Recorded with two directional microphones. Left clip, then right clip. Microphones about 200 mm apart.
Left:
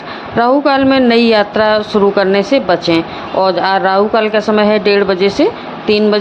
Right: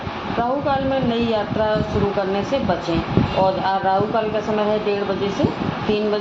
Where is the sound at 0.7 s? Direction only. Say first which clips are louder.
Left 10 dB; 50° left (ahead or behind).